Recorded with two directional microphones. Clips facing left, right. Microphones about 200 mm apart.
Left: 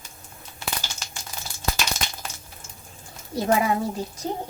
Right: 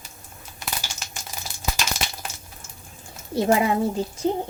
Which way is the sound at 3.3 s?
25° right (ahead or behind).